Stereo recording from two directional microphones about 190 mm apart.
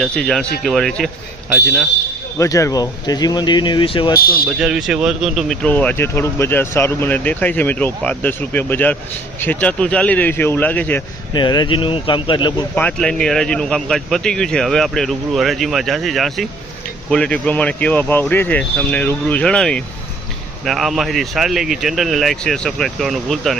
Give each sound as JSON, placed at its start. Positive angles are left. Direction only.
{"t": 0.0, "sound": "speech", "side_deg": 5}
{"t": 2.4, "sound": "speech", "side_deg": 15}
{"t": 4.2, "sound": "speech", "side_deg": 50}
{"t": 4.4, "sound": "speech", "side_deg": -5}
{"t": 11.3, "sound": "speech", "side_deg": 20}
{"t": 12.7, "sound": "speech", "side_deg": 5}